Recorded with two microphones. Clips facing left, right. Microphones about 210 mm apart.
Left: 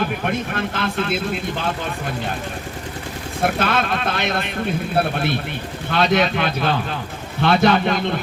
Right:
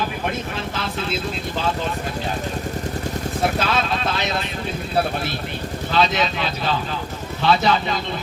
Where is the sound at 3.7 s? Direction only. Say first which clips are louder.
Left 1 dB; 55° left (ahead or behind).